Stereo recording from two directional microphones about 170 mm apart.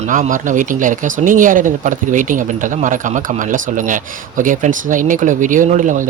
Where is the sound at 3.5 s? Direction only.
50° right (ahead or behind).